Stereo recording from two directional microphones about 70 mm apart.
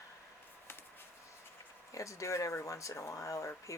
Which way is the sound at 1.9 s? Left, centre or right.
Left.